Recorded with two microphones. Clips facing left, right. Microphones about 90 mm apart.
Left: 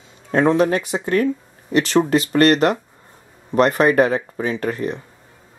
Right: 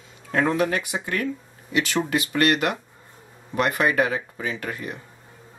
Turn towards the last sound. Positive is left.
turn(degrees=35)  # may be behind; listen again after turning